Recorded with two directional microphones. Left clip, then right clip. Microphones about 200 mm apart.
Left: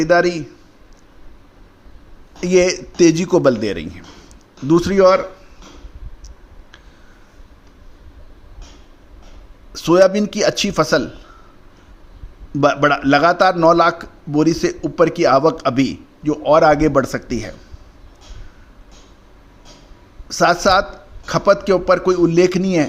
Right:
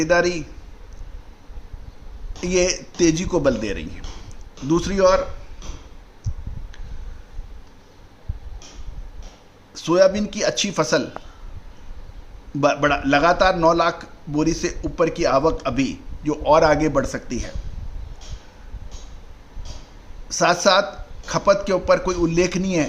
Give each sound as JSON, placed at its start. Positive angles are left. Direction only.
{"t": 0.0, "sound": "a man's voice", "side_deg": 25}
{"t": 2.4, "sound": "a man's voice", "side_deg": 30}
{"t": 9.7, "sound": "a man's voice", "side_deg": 35}
{"t": 12.5, "sound": "a man's voice", "side_deg": 30}
{"t": 16.2, "sound": "a man's voice", "side_deg": 15}
{"t": 20.2, "sound": "a man's voice", "side_deg": 25}